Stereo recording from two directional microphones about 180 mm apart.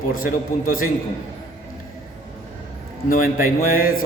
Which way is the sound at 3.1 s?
50° left (ahead or behind).